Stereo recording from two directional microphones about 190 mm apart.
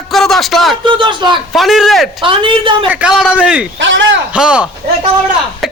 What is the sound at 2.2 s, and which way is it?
Speech, 25° right (ahead or behind).